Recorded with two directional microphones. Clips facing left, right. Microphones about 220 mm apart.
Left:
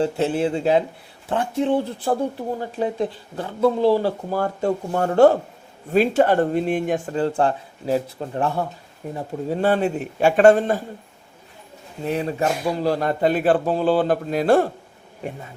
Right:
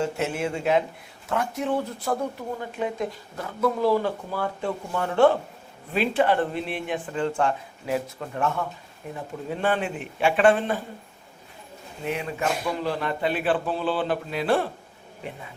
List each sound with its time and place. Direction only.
0.0 s speech: 30° left (ahead or behind)
12.0 s speech: 35° left (ahead or behind)